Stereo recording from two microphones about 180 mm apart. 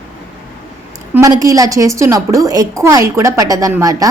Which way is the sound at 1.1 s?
20° right (ahead or behind).